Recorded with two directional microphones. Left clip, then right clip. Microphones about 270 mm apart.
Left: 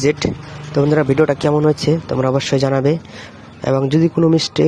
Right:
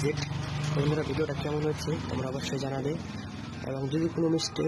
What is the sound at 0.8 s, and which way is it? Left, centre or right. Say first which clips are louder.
Speech: left 17 dB; left.